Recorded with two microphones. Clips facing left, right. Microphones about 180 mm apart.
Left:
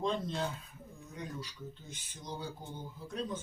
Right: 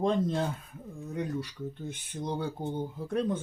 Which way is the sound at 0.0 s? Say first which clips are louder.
Right 7 dB; 50° right (ahead or behind).